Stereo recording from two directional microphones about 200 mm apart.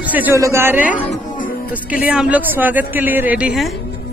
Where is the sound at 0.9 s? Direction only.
40° left (ahead or behind).